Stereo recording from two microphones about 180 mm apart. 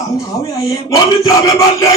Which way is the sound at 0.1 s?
20° left (ahead or behind).